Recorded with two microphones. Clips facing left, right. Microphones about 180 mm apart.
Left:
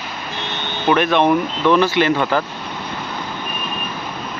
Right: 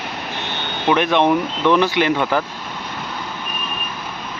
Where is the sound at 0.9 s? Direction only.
15° right (ahead or behind).